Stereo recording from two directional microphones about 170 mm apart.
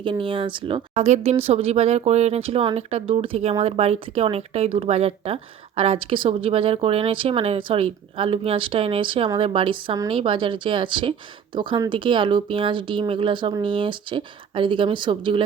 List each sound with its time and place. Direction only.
0.0 s speech: 30° right (ahead or behind)